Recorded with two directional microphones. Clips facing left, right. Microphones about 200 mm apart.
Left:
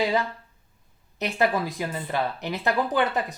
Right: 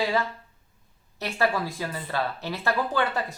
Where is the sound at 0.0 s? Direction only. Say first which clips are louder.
Left 2 dB; 20° left (ahead or behind).